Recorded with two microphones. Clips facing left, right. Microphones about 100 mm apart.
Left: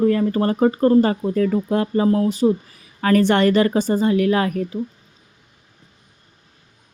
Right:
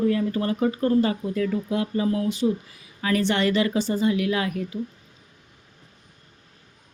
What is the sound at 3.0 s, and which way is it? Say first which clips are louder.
Speech: left 7 dB; 50° left (ahead or behind).